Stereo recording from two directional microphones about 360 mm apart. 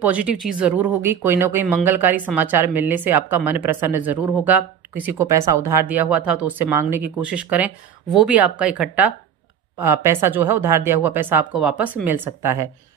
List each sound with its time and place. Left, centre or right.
0.0 s speech: centre